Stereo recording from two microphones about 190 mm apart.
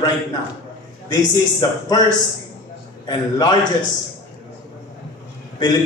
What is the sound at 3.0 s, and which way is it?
Speech, 20° left (ahead or behind).